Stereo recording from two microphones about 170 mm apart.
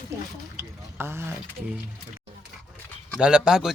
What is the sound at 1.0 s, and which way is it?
Speech, 15° right (ahead or behind).